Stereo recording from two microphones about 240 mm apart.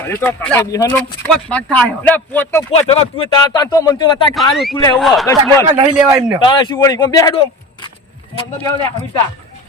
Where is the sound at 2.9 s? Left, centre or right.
Left.